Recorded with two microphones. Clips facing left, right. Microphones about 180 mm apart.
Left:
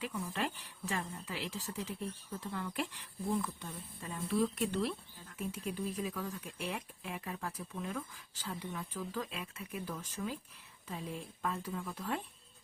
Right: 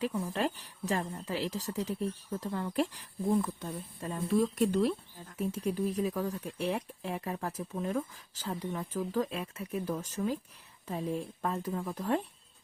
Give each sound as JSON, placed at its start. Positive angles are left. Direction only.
{"t": 0.0, "sound": "speech", "side_deg": -40}